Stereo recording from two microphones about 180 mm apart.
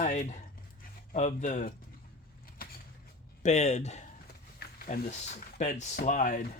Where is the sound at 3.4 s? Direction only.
40° left (ahead or behind).